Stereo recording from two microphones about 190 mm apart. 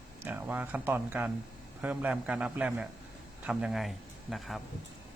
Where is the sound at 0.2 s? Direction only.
10° right (ahead or behind).